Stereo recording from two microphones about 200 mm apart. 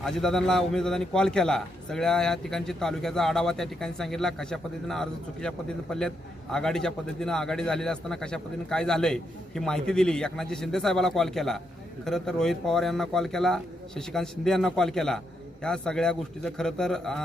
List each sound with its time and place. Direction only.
0.0 s a man's voice: centre (ahead or behind)